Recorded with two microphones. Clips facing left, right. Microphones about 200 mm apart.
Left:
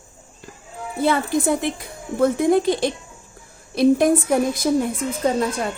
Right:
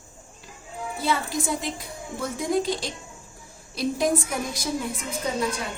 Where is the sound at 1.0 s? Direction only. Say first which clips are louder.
Left 8 dB; 55° left (ahead or behind).